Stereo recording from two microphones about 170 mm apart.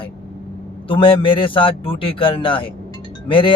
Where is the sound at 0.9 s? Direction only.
30° left (ahead or behind).